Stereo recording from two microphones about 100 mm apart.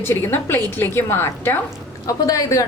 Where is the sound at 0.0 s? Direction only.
25° left (ahead or behind).